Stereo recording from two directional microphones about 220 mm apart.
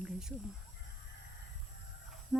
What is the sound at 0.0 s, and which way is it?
Crow, 5° right (ahead or behind).